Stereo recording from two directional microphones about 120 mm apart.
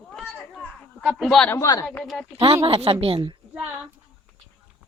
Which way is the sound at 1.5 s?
30° left (ahead or behind).